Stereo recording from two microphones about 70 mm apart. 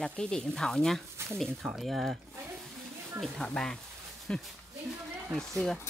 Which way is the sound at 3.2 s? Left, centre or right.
Centre.